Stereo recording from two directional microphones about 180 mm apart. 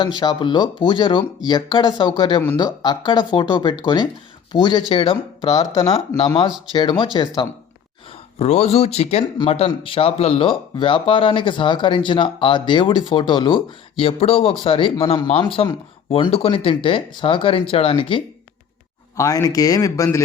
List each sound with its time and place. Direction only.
0.0 s speech: 25° left (ahead or behind)
19.1 s speech: 15° left (ahead or behind)